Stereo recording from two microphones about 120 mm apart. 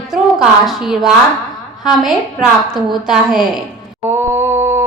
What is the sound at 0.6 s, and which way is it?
Speech, centre (ahead or behind).